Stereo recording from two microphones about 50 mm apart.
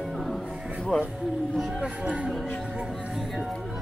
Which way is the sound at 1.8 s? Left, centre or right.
Right.